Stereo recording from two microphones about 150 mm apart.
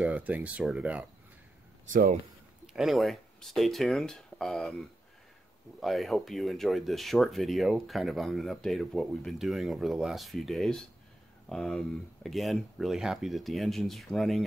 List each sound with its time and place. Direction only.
0.0 s speech: 10° right (ahead or behind)
1.9 s speech: 60° right (ahead or behind)
2.6 s speech: centre (ahead or behind)